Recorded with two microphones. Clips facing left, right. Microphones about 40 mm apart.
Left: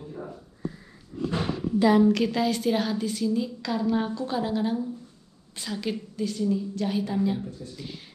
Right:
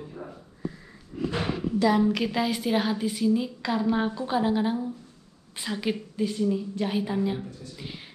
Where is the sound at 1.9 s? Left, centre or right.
Centre.